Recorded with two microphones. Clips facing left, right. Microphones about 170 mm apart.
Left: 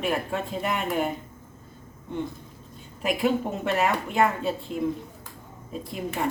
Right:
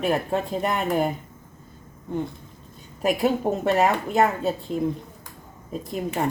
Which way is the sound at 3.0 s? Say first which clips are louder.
Right 3 dB; 40° right (ahead or behind).